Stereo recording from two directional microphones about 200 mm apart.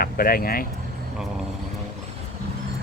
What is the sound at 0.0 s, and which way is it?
Speech, 45° left (ahead or behind).